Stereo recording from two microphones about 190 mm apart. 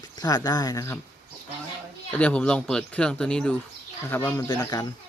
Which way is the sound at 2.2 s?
5° left (ahead or behind).